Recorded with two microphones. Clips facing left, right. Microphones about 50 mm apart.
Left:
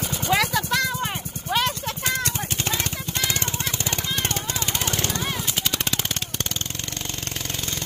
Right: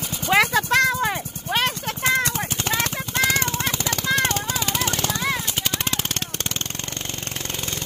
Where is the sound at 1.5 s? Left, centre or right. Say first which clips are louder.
Right 1 dB; right.